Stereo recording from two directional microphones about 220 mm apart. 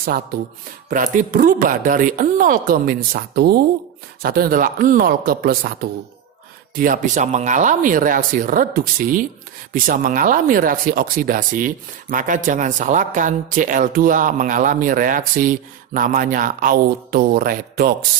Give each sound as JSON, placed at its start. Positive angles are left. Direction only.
{"t": 0.0, "sound": "speech", "side_deg": -40}